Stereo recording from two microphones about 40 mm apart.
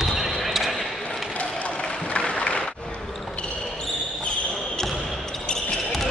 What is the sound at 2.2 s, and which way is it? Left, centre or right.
Applause, left.